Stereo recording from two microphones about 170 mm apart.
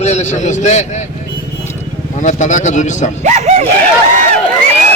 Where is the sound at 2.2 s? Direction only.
45° left (ahead or behind).